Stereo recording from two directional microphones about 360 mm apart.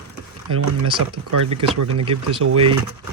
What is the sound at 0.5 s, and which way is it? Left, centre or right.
Speech, right.